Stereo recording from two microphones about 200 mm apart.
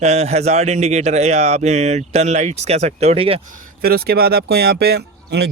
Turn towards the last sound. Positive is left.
turn(degrees=-55)  # may be behind; listen again after turning